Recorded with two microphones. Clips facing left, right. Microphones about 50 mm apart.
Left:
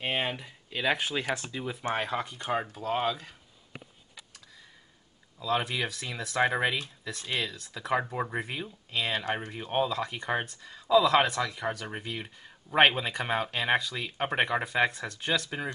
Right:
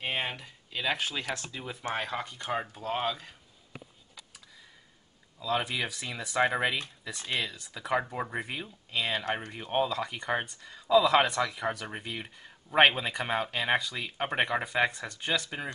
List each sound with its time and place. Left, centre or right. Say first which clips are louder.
0.0 s a sound: left 2 dB; centre
0.8 s speech: left 3 dB; centre
1.6 s speech: left 3 dB; centre
5.4 s speech: left 1 dB; centre